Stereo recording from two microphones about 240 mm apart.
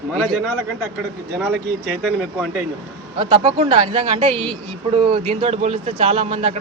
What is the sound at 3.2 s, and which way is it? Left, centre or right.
Speech, right.